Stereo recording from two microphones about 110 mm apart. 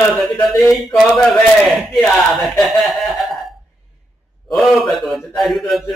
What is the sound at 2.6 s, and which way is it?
Snicker, centre (ahead or behind).